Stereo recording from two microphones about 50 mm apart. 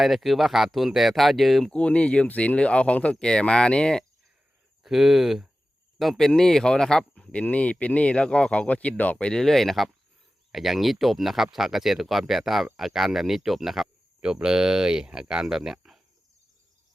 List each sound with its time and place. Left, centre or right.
0.0 s speech: centre
1.7 s speech: left
4.8 s speech: centre
7.3 s speech: left
9.3 s speech: centre
14.2 s speech: centre